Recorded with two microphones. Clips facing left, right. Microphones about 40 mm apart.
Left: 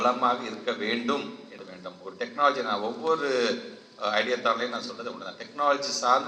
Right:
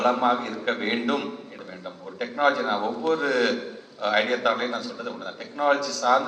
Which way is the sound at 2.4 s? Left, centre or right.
Right.